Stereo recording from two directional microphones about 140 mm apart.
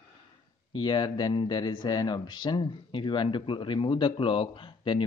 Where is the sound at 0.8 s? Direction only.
30° left (ahead or behind).